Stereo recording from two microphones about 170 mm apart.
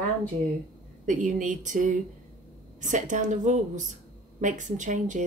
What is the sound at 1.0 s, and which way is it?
Speech, 50° right (ahead or behind).